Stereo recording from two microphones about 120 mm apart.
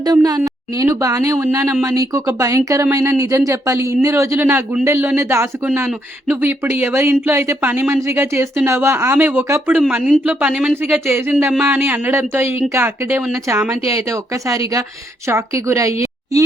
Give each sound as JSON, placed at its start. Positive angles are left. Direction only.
{"t": 0.0, "sound": "a woman's voice", "side_deg": -30}